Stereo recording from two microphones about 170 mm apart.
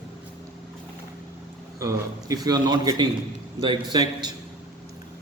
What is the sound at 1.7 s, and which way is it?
A man's voice, 20° right (ahead or behind).